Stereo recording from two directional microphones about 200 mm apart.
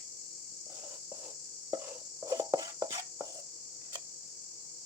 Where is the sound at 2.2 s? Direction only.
20° right (ahead or behind).